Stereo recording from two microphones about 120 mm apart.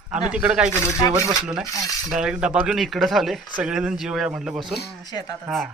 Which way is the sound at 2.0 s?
5° right (ahead or behind).